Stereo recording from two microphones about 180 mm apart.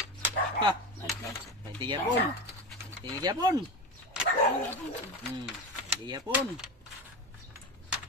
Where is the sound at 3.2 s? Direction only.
20° right (ahead or behind).